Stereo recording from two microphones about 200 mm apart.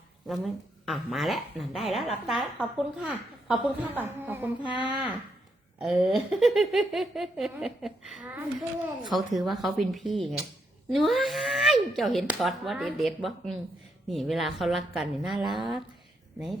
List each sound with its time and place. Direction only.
0.3 s speech: centre (ahead or behind)